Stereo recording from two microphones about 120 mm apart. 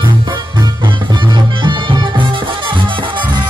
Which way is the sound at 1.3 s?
40° right (ahead or behind).